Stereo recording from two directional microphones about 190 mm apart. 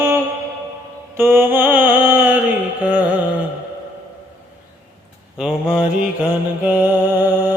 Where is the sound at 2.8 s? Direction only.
5° right (ahead or behind).